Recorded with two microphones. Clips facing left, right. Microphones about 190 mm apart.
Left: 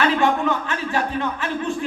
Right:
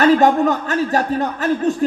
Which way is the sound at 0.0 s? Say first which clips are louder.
Right 6 dB; 40° right (ahead or behind).